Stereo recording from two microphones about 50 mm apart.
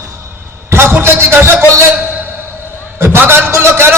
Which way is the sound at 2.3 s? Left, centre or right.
Right.